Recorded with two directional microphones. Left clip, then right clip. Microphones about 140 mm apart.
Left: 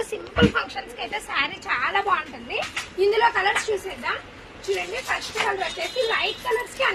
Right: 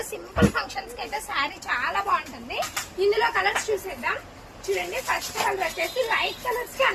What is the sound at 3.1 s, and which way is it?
Speech, 15° left (ahead or behind).